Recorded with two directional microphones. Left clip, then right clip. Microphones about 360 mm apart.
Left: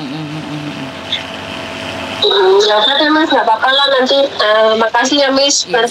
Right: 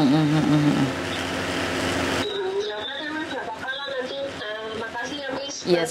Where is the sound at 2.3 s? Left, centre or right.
Left.